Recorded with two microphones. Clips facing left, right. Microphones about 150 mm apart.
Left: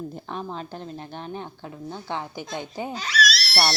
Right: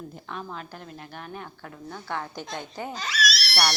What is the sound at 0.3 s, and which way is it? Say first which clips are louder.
A woman's voice: left 1 dB; 30° left (ahead or behind).